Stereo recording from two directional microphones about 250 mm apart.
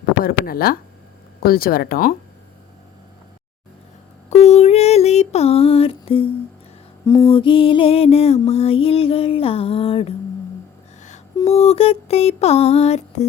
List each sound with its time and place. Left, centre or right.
0.2 s speech: left
4.3 s a sound: left
7.0 s mantra: centre
7.3 s music: left
11.3 s music: left